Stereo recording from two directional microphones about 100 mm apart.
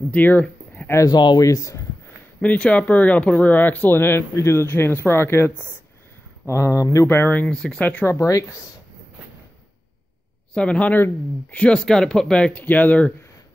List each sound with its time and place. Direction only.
0.1 s a sound: 15° left (ahead or behind)
0.9 s speech: 40° left (ahead or behind)
2.4 s speech: 15° left (ahead or behind); by 7.1 s 35° left (ahead or behind)
7.1 s speech: 20° left (ahead or behind)
8.2 s speech: 30° left (ahead or behind)
10.5 s speech: 10° left (ahead or behind)